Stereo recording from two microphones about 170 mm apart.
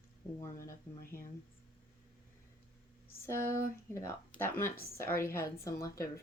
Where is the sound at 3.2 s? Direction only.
15° left (ahead or behind).